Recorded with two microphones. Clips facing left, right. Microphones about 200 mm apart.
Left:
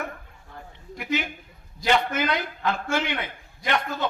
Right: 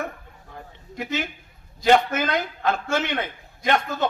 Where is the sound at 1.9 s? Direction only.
45° right (ahead or behind).